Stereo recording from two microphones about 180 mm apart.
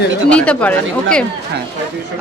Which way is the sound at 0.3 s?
5° left (ahead or behind).